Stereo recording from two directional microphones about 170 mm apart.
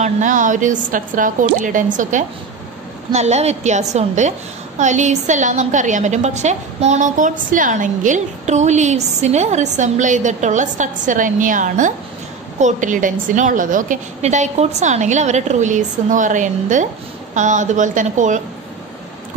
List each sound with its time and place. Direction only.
0.0 s a woman's voice: 50° right (ahead or behind)